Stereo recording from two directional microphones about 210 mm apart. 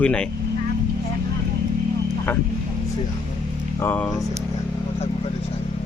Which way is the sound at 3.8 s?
10° left (ahead or behind).